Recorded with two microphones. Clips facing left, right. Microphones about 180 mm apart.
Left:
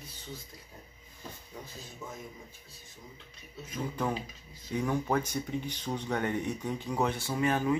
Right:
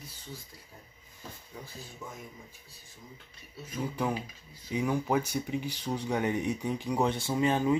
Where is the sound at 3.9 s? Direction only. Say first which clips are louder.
Even; 10° right (ahead or behind).